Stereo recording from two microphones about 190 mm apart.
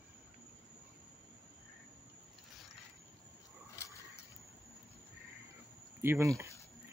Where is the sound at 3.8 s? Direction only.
15° left (ahead or behind).